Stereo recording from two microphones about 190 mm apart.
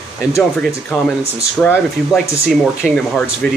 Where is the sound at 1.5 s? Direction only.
5° left (ahead or behind).